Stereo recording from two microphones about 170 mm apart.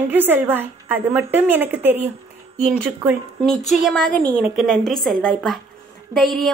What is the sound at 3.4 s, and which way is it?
A child's voice, centre (ahead or behind).